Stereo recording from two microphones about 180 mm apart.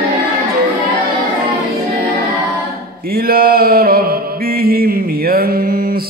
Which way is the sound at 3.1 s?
55° right (ahead or behind).